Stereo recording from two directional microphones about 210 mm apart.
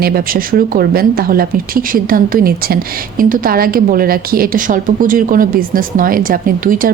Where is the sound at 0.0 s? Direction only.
45° right (ahead or behind).